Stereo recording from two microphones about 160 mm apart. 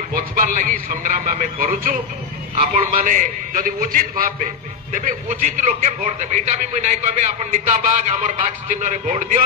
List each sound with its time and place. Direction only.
0.1 s a man's voice: 60° right (ahead or behind)